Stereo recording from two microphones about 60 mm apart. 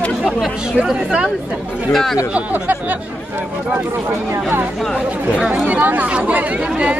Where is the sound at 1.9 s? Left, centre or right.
Centre.